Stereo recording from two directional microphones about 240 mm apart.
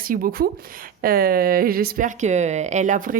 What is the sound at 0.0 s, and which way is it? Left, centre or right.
Speech, right.